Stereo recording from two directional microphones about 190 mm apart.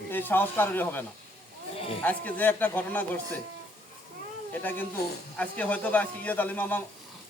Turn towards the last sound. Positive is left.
turn(degrees=10)  # may be behind; listen again after turning